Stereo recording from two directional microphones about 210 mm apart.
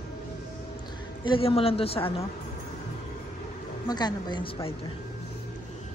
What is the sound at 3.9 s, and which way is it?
Speech, 20° left (ahead or behind).